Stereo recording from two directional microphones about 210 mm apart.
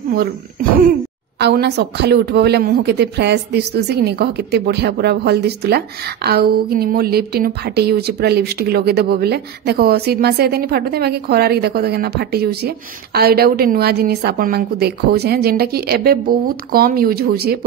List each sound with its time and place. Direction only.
1.4 s a woman's voice: 50° right (ahead or behind)